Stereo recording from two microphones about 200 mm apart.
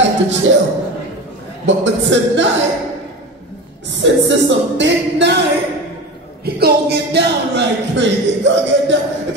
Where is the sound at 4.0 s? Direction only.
65° right (ahead or behind).